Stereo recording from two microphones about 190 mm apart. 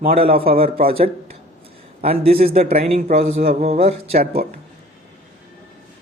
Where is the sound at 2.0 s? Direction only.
30° right (ahead or behind).